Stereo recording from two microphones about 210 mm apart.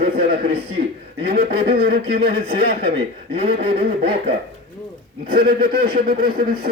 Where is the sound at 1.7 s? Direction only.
45° right (ahead or behind).